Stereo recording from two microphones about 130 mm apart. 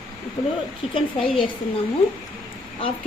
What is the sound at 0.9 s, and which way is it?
Speech, 40° left (ahead or behind).